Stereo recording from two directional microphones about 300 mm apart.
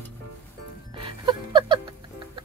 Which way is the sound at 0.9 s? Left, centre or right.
Centre.